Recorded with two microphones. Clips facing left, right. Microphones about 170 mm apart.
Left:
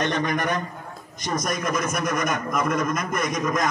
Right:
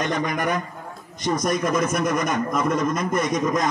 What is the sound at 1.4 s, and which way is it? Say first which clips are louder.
A man's voice: right 4 dB; 25° right (ahead or behind).